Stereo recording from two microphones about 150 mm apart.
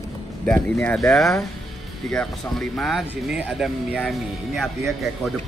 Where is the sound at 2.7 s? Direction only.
Centre (ahead or behind).